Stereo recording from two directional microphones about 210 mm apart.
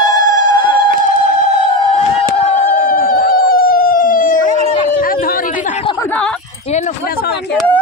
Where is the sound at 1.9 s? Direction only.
30° left (ahead or behind).